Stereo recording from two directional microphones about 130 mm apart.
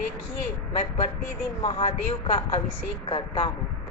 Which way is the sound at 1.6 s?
50° left (ahead or behind).